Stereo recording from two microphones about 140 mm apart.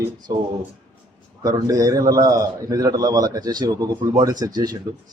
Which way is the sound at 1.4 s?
25° right (ahead or behind).